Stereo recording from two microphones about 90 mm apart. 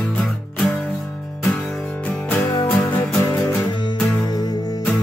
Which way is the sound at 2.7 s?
20° left (ahead or behind).